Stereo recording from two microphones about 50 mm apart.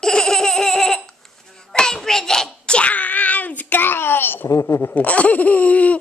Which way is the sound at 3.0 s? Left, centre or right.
Left.